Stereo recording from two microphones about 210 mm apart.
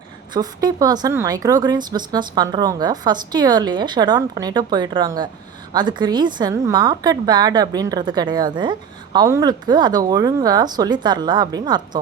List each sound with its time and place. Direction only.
0.3 s speech: 20° right (ahead or behind)